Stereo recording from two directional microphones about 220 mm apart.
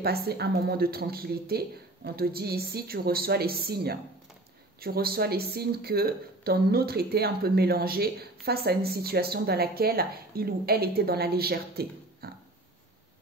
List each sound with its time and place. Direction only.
0.0 s speech: 45° right (ahead or behind)